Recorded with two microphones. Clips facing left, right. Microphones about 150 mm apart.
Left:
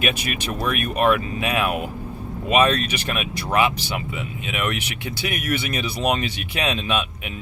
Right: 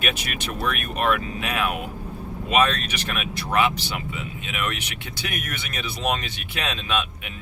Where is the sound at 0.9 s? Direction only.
15° left (ahead or behind).